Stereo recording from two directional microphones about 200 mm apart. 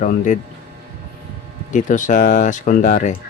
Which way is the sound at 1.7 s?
40° left (ahead or behind).